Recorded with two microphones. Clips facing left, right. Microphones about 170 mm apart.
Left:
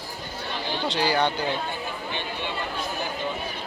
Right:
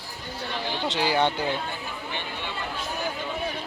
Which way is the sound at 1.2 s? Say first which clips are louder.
Right 1 dB; 25° right (ahead or behind).